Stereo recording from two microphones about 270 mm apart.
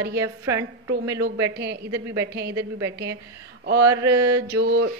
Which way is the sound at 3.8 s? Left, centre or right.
Centre.